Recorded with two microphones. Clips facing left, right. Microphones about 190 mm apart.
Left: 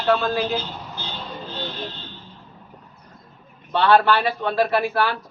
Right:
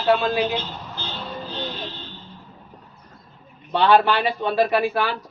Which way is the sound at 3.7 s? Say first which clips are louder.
Even; 15° right (ahead or behind).